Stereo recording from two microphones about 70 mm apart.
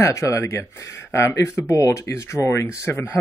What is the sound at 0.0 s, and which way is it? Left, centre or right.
Speech, left.